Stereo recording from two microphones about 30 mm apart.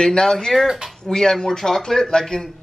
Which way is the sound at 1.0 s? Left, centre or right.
Centre.